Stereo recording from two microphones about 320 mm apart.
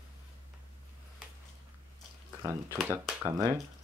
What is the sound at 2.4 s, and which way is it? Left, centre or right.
Speech, centre.